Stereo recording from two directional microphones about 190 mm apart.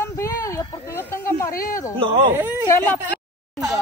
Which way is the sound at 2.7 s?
10° left (ahead or behind).